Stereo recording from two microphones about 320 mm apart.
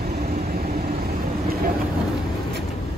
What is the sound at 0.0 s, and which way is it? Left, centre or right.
Vehicle, right.